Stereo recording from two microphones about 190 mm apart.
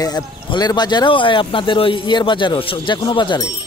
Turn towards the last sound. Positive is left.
turn(degrees=25)  # may be behind; listen again after turning